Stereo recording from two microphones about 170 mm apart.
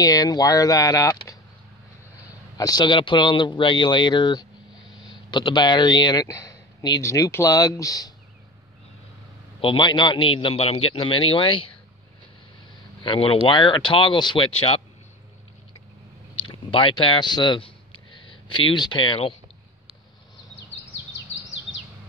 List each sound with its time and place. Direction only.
0.0 s speech: 20° left (ahead or behind)
2.5 s speech: 20° left (ahead or behind)
9.6 s a man's voice: 30° left (ahead or behind)
13.0 s speech: 30° left (ahead or behind)
16.3 s a sound: 30° left (ahead or behind)